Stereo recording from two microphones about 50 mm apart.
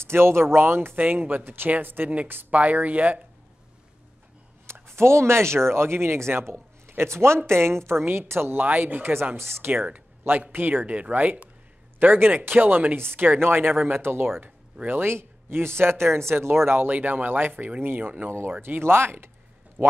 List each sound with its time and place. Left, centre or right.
0.0 s speech: right
0.9 s speech: right
2.6 s speech: right
4.8 s speech: right
8.6 s speech: right
9.4 s speech: right
14.0 s speech: right
16.9 s speech: right
17.5 s speech: right
17.8 s speech: right
18.6 s speech: right
19.8 s speech: right